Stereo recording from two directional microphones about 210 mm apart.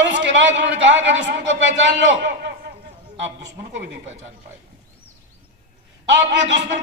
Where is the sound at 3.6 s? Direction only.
60° right (ahead or behind).